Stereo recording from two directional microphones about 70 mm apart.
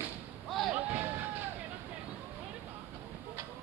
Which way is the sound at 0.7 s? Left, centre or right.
Right.